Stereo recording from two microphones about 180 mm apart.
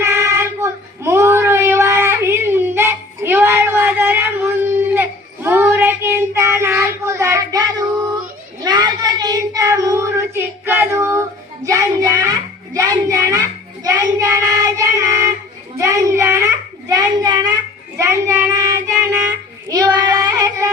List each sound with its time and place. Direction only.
0.0 s child singing: 15° right (ahead or behind)